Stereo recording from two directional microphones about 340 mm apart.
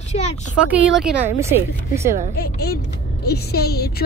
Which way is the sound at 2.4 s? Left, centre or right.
Left.